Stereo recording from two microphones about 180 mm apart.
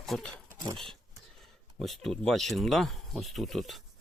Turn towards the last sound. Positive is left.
turn(degrees=0)  # may be behind; listen again after turning